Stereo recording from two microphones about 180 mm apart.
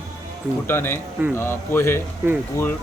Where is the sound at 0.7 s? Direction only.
15° left (ahead or behind).